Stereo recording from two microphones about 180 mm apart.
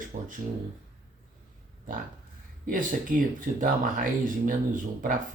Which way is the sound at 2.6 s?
50° right (ahead or behind).